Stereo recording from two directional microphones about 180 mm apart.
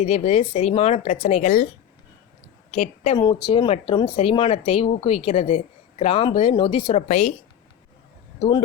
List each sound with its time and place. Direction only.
0.0 s speech: 40° left (ahead or behind)
2.7 s speech: 40° left (ahead or behind)
3.2 s speech: 25° left (ahead or behind)
8.4 s speech: 25° left (ahead or behind)